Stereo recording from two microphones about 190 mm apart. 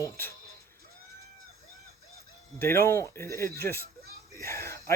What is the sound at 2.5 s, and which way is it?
Speech, 15° left (ahead or behind).